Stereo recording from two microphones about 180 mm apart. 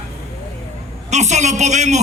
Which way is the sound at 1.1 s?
40° right (ahead or behind).